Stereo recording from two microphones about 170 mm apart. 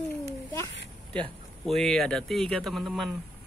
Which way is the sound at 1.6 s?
Centre (ahead or behind).